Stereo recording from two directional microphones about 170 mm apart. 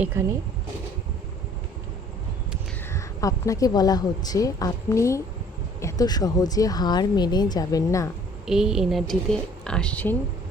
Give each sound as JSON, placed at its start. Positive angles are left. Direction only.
{"t": 0.0, "sound": "speech", "side_deg": -15}
{"t": 2.9, "sound": "speech", "side_deg": 20}
{"t": 8.4, "sound": "a woman's voice", "side_deg": -5}